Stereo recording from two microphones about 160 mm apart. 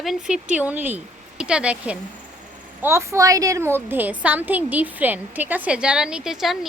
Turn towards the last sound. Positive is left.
turn(degrees=0)  # may be behind; listen again after turning